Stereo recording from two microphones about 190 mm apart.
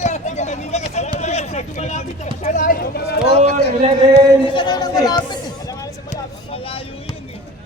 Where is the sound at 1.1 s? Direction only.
35° left (ahead or behind).